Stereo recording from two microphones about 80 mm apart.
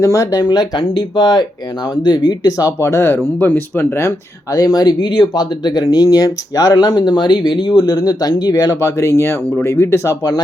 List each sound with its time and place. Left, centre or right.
0.0 s speech: left
0.9 s speech: left
3.4 s speech: left
4.5 s speech: left
5.0 s speech: left